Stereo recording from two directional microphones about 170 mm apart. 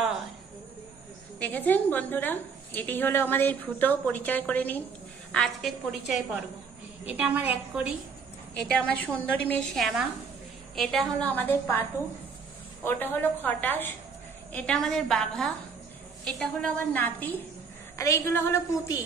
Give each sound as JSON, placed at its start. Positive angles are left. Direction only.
{"t": 1.4, "sound": "a woman's voice", "side_deg": 10}
{"t": 8.6, "sound": "a woman's voice", "side_deg": 5}
{"t": 12.8, "sound": "a woman's voice", "side_deg": 10}